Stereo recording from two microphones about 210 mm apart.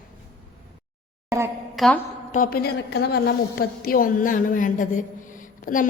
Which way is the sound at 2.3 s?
40° left (ahead or behind).